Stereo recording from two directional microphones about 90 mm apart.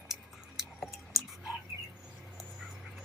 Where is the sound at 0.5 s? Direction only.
Centre (ahead or behind).